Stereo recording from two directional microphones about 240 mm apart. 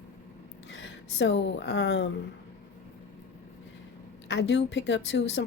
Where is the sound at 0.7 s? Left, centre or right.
Left.